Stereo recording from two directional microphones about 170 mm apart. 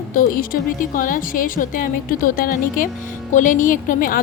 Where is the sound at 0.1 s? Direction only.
55° left (ahead or behind).